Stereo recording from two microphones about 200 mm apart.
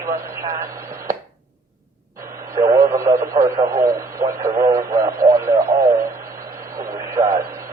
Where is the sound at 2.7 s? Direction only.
15° right (ahead or behind).